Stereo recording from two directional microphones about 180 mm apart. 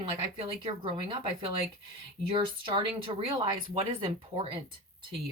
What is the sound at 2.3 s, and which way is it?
Speech, 30° right (ahead or behind).